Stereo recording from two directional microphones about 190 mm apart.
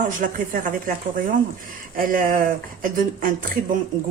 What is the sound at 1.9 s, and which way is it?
A woman's voice, 50° right (ahead or behind).